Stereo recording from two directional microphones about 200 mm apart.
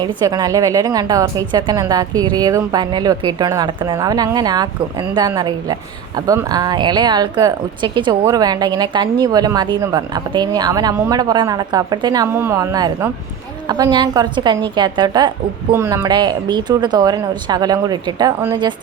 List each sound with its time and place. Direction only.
0.0 s speech: 20° right (ahead or behind)